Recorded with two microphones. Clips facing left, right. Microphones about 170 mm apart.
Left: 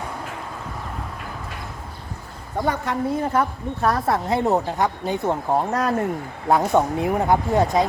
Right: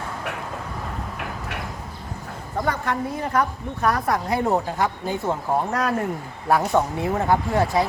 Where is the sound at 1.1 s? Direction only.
70° right (ahead or behind).